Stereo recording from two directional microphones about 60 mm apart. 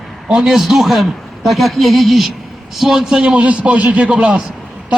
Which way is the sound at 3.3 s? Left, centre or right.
Right.